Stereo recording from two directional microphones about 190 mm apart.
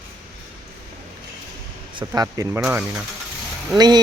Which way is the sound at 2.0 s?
20° right (ahead or behind).